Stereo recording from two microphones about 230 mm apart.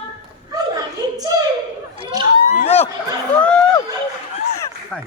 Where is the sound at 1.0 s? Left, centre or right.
Centre.